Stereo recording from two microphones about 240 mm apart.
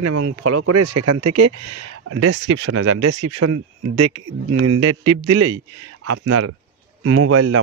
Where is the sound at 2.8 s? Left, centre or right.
Right.